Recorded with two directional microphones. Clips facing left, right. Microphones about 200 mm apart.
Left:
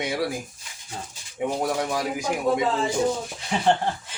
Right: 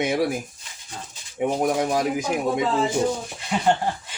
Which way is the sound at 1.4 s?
20° right (ahead or behind).